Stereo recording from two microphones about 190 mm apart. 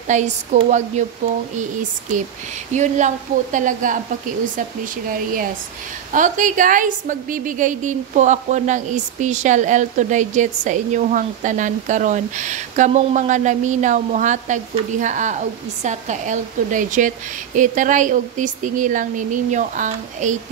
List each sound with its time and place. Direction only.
0.1 s a woman's voice: 40° right (ahead or behind)
6.1 s a woman's voice: 40° right (ahead or behind)